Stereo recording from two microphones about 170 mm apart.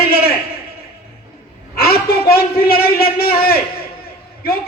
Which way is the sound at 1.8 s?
65° left (ahead or behind).